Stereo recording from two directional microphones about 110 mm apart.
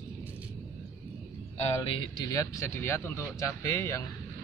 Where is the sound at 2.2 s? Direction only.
30° left (ahead or behind).